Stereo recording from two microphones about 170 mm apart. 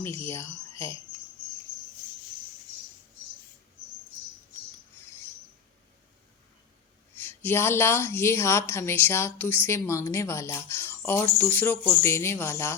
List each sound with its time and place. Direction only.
0.0 s speech: 15° left (ahead or behind)
7.3 s a woman's voice: 15° left (ahead or behind)